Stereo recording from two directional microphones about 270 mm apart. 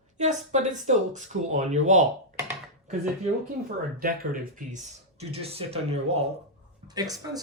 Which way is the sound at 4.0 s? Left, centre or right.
Right.